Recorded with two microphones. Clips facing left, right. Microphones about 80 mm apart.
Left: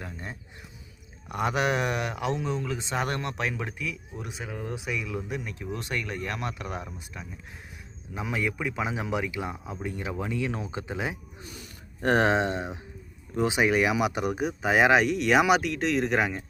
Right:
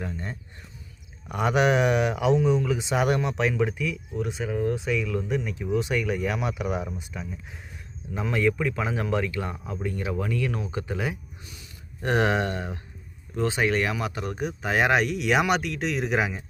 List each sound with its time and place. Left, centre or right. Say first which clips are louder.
0.0 s speech: right 5 dB; centre; by 11.2 s left
11.4 s speech: left 3 dB; left; by 16.4 s centre